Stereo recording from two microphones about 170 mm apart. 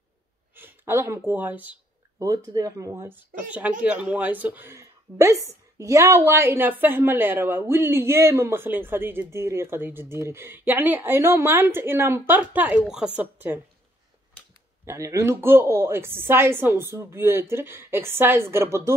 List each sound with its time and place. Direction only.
0.6 s a woman's voice: 15° right (ahead or behind)
14.9 s a woman's voice: 15° right (ahead or behind)